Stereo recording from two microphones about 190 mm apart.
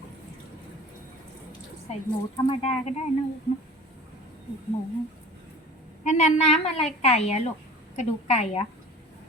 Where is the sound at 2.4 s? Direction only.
35° left (ahead or behind).